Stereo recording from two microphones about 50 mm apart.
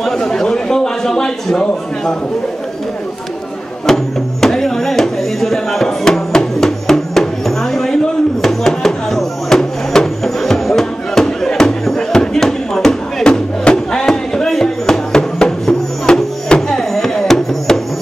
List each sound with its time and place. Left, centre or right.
0.0 s a man's voice: centre
3.8 s music: centre
13.7 s a sound: centre